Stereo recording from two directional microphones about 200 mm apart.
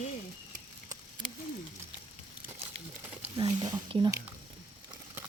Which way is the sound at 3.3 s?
20° right (ahead or behind).